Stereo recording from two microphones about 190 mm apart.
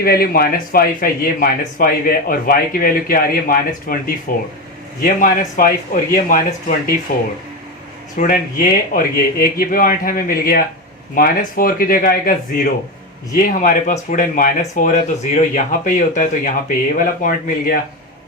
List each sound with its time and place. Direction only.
0.0 s speech: 50° left (ahead or behind)